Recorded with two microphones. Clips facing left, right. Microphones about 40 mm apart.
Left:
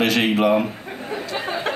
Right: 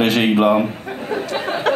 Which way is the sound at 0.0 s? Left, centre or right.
Right.